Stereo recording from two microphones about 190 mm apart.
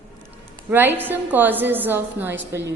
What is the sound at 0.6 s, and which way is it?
A woman's voice, 10° right (ahead or behind).